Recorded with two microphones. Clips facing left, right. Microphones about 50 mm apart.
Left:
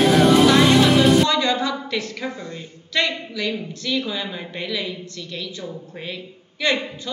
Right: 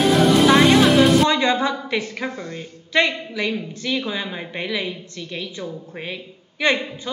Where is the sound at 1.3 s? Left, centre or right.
Right.